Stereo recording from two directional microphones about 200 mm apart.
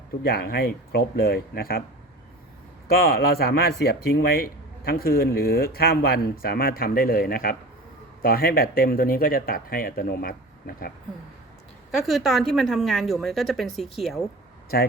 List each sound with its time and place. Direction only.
0.3 s speech: 50° left (ahead or behind)
2.8 s speech: 50° left (ahead or behind)
11.9 s a woman's voice: centre (ahead or behind)
14.7 s speech: 50° left (ahead or behind)